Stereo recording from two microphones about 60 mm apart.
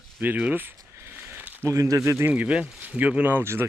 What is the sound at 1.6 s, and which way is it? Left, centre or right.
Speech, right.